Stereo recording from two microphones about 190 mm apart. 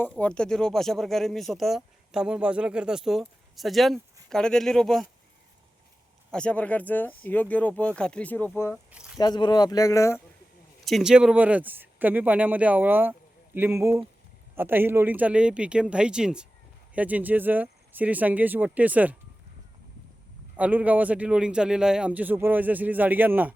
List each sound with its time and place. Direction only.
0.2 s speech: 5° left (ahead or behind)
6.3 s speech: 5° left (ahead or behind)
8.9 s squish: 5° right (ahead or behind)
9.1 s speech: 20° left (ahead or behind)
10.8 s speech: centre (ahead or behind)
20.6 s speech: 10° right (ahead or behind)